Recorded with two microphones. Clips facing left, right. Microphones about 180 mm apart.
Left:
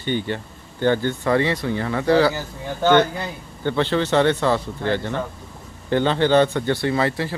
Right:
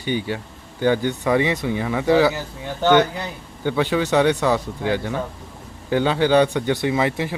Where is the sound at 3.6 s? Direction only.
10° right (ahead or behind).